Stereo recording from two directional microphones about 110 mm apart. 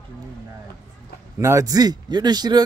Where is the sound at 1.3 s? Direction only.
25° right (ahead or behind).